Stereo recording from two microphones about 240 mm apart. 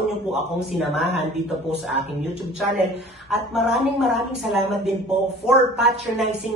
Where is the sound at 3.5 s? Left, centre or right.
Centre.